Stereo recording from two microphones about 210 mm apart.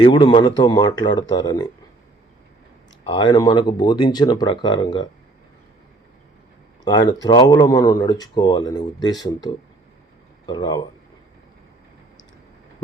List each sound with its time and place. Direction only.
0.0 s speech: 25° left (ahead or behind)
3.2 s speech: 20° left (ahead or behind)
6.8 s speech: 20° left (ahead or behind)